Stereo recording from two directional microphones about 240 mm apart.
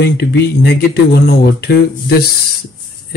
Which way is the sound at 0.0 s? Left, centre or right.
Left.